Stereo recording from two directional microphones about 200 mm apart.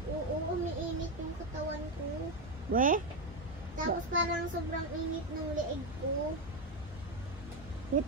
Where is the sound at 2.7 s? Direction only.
40° right (ahead or behind).